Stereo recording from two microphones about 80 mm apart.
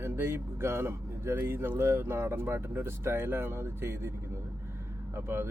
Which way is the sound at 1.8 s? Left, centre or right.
Right.